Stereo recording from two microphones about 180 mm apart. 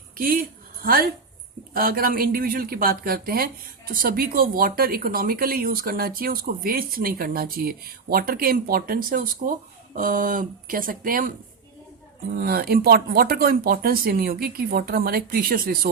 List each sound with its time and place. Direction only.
0.2 s speech: 55° right (ahead or behind)
12.4 s speech: 55° right (ahead or behind)